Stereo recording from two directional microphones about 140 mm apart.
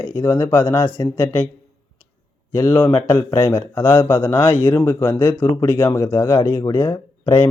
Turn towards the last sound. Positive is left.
turn(degrees=35)  # may be behind; listen again after turning